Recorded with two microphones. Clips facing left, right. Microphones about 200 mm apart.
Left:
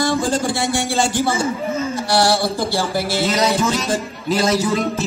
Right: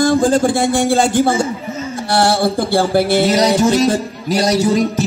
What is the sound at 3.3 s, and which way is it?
Music, 40° right (ahead or behind).